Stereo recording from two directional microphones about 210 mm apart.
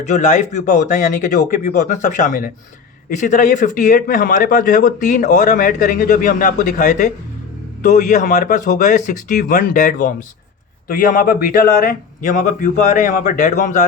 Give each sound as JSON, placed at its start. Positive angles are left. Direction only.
{"t": 0.0, "sound": "speech", "side_deg": 35}